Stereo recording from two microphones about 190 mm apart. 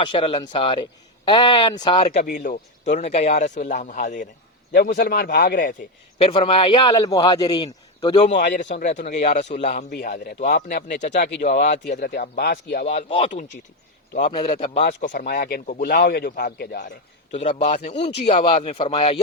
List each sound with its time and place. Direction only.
0.0 s a man's voice: 25° left (ahead or behind)
2.2 s a man's voice: 45° left (ahead or behind)
4.7 s speech: 55° left (ahead or behind)
6.1 s a man's voice: 30° left (ahead or behind)
9.9 s speech: 50° left (ahead or behind)
12.8 s a man's voice: 30° left (ahead or behind)
15.2 s speech: 55° left (ahead or behind)
17.3 s a man's voice: 35° left (ahead or behind)